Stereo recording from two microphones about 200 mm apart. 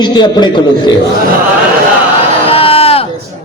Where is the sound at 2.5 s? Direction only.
30° left (ahead or behind).